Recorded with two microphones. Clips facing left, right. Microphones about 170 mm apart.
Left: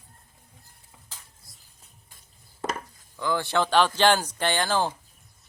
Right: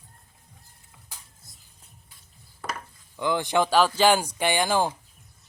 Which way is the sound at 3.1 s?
20° right (ahead or behind).